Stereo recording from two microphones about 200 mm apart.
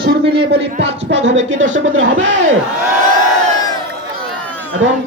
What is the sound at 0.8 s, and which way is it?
A man's voice, 65° right (ahead or behind).